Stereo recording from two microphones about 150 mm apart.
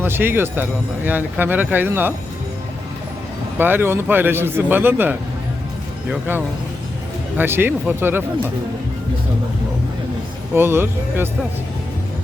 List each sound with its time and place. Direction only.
0.0 s speech: 15° right (ahead or behind)
3.6 s speech: 15° right (ahead or behind)
10.5 s speech: 15° right (ahead or behind)